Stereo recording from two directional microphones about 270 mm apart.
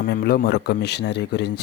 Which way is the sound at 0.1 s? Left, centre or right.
Left.